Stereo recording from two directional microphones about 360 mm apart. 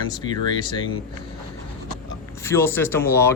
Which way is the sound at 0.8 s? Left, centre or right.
Left.